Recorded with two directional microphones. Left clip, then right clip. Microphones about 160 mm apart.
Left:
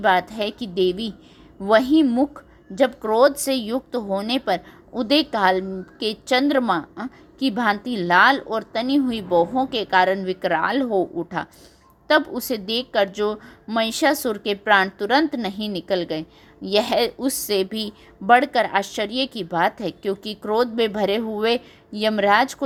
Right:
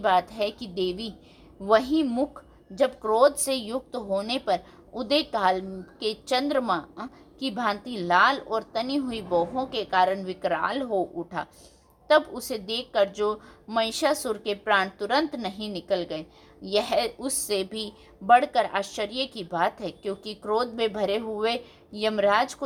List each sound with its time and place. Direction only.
0.0 s a woman's voice: 25° left (ahead or behind)